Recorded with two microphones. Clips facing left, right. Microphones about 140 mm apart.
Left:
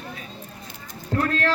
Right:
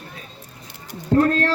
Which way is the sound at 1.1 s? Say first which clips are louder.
Right 6 dB; 35° right (ahead or behind).